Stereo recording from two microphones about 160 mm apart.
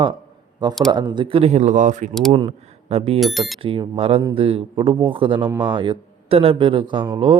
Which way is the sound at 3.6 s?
35° right (ahead or behind).